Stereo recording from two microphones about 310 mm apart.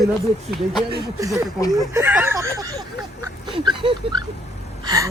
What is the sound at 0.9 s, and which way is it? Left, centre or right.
Speech, centre.